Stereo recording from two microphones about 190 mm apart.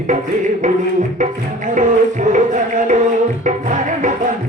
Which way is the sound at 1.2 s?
40° right (ahead or behind).